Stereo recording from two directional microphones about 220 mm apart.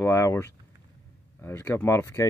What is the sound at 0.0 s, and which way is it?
Speech, 10° left (ahead or behind).